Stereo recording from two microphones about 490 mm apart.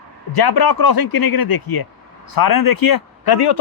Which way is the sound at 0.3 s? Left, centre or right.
Left.